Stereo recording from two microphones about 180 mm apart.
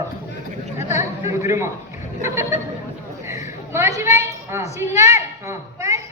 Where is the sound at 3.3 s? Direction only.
15° right (ahead or behind).